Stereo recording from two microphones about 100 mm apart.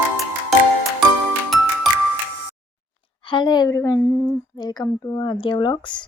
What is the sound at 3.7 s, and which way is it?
A woman's voice, 30° left (ahead or behind).